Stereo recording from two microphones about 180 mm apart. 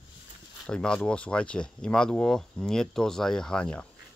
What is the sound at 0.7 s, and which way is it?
Speech, 5° left (ahead or behind).